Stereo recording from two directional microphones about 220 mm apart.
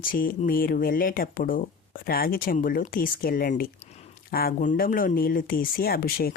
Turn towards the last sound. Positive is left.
turn(degrees=40)  # may be behind; listen again after turning